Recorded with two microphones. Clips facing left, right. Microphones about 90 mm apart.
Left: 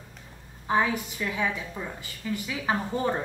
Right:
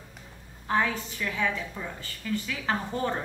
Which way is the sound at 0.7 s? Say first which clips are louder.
Left 2 dB; 15° left (ahead or behind).